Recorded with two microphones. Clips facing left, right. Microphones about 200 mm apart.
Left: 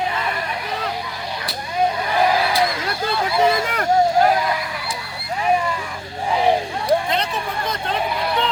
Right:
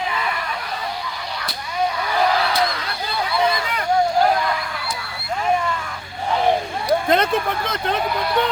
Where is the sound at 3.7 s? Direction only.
45° left (ahead or behind).